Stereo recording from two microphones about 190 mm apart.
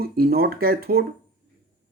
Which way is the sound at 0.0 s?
55° right (ahead or behind).